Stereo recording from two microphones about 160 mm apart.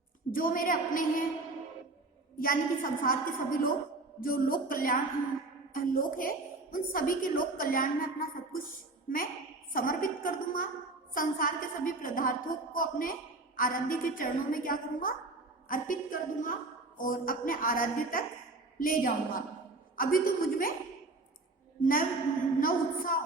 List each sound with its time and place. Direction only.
0.3 s a woman's voice: 60° left (ahead or behind)
2.4 s a woman's voice: 60° left (ahead or behind)
9.7 s a woman's voice: 60° left (ahead or behind)
21.8 s a woman's voice: 60° left (ahead or behind)